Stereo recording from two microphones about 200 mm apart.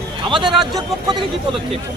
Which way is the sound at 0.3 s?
25° right (ahead or behind).